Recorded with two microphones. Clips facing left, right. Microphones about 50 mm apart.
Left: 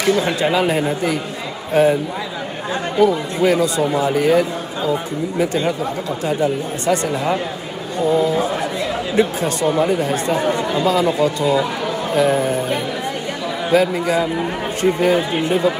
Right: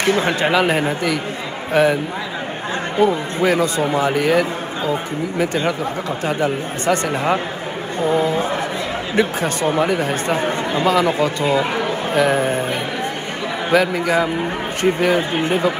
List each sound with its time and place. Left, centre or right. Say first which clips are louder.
0.0 s speech: even; right
3.0 s speech: left 1 dB; right